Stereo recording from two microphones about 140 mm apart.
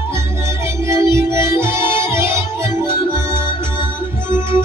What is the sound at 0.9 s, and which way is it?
Music, 20° right (ahead or behind).